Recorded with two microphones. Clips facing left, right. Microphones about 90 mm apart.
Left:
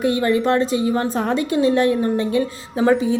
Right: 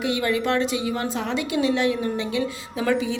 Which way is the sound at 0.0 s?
35° left (ahead or behind).